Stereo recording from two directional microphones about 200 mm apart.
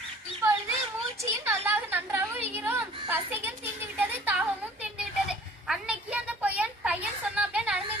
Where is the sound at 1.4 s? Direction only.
10° right (ahead or behind).